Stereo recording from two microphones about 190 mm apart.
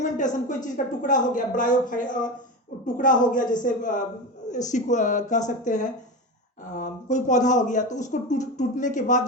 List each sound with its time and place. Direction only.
0.0 s speech: 40° left (ahead or behind)